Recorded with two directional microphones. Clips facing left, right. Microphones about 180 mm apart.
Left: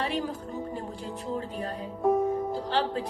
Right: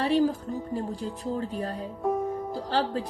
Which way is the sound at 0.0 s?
35° right (ahead or behind).